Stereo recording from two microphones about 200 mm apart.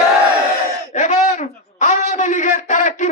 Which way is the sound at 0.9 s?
35° left (ahead or behind).